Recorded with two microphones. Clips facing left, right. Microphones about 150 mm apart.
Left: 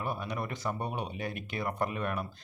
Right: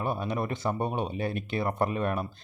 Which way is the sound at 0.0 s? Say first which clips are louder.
Right 5 dB; 25° right (ahead or behind).